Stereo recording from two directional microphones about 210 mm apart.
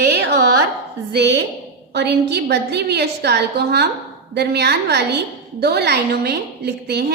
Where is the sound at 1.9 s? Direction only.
50° right (ahead or behind).